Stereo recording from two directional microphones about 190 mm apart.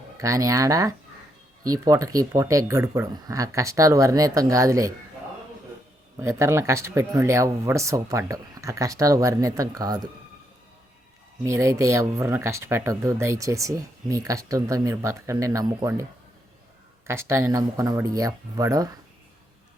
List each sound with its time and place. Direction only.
0.2 s speech: 15° right (ahead or behind)
6.1 s speech: 15° right (ahead or behind)
11.4 s speech: 15° right (ahead or behind)
17.1 s speech: 15° right (ahead or behind)